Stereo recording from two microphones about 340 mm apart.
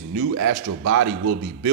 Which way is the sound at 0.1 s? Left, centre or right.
Right.